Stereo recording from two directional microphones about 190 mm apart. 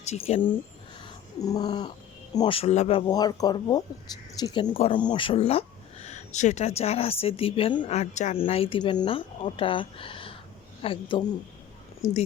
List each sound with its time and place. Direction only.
0.0 s speech: 35° left (ahead or behind)
1.0 s cat: 20° left (ahead or behind)
2.3 s speech: 25° left (ahead or behind)
7.9 s speech: 35° left (ahead or behind)